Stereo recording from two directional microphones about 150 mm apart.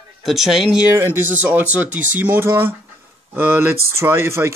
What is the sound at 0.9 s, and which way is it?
Speech, 15° right (ahead or behind).